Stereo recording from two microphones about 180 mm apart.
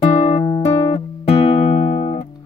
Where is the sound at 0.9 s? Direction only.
35° left (ahead or behind).